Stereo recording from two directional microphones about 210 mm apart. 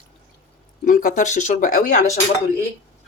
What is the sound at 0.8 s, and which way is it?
Speech, 35° left (ahead or behind).